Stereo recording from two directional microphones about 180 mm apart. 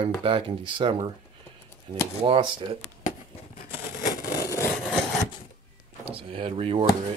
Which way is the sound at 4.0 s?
55° left (ahead or behind).